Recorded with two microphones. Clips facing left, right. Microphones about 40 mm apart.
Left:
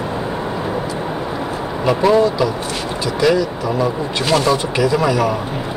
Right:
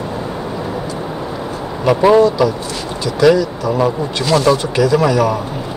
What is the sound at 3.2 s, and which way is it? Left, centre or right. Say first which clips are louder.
Speech: right 4 dB; centre.